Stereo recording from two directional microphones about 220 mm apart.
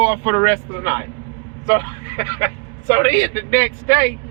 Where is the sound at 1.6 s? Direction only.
15° left (ahead or behind).